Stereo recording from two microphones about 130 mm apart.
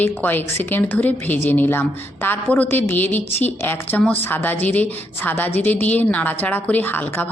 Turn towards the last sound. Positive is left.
turn(degrees=15)  # may be behind; listen again after turning